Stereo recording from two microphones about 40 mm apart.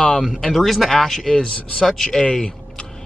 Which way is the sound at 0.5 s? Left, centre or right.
Centre.